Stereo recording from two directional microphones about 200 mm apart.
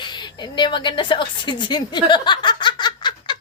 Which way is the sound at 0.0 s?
20° left (ahead or behind).